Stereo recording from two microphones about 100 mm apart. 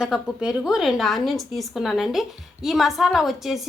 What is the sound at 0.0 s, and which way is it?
A woman's voice, 5° right (ahead or behind).